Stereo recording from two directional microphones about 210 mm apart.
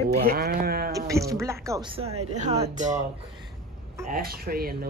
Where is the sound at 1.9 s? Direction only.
30° right (ahead or behind).